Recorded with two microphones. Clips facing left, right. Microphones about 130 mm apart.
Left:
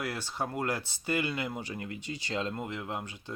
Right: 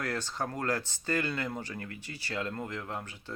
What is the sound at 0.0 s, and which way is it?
Speech, 10° left (ahead or behind).